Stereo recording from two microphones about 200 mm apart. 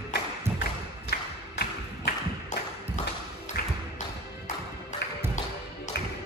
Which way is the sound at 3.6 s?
55° left (ahead or behind).